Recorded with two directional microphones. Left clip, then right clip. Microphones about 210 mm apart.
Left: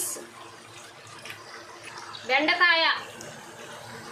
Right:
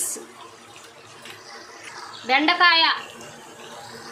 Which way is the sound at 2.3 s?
45° right (ahead or behind).